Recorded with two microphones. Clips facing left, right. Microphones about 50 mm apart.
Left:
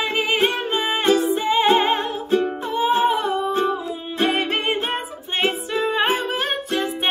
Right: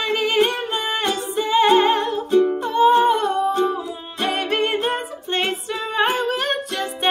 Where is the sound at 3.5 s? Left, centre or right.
Left.